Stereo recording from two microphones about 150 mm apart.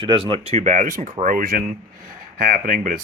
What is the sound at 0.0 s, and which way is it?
Speech, 35° right (ahead or behind).